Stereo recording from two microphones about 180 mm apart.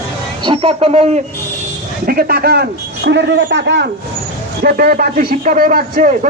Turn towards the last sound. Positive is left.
turn(degrees=-50)  # may be behind; listen again after turning